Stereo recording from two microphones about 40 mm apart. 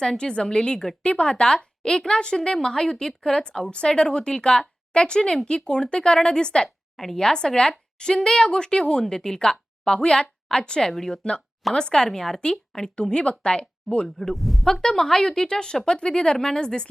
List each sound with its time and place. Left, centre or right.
0.0 s a woman's voice: centre
6.9 s a woman's voice: centre; by 14.1 s left
14.2 s a man's voice: centre
14.7 s a woman's voice: centre